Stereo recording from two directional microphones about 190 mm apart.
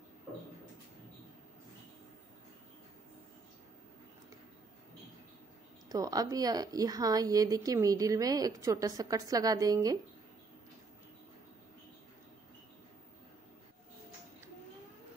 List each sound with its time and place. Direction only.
5.9 s a woman's voice: 20° right (ahead or behind)